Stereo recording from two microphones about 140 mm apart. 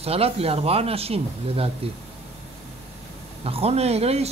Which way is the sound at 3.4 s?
45° right (ahead or behind).